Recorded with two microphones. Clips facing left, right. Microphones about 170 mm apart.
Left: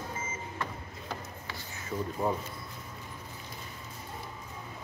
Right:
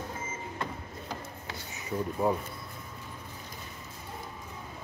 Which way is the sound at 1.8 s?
15° right (ahead or behind).